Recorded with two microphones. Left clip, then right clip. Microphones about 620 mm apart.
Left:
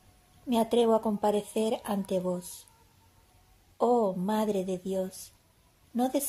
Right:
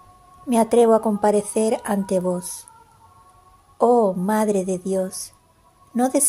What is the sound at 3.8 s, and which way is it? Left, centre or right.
Speech, left.